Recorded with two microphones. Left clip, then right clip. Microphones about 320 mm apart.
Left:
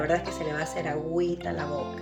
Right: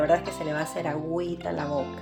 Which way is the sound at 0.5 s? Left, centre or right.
Right.